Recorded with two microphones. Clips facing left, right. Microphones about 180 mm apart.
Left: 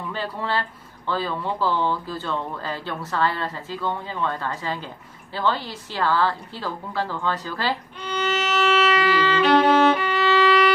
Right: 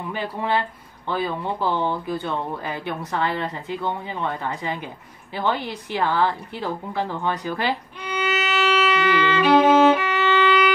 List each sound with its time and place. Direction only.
0.1 s a woman's voice: 15° right (ahead or behind)
8.8 s violin: 5° right (ahead or behind)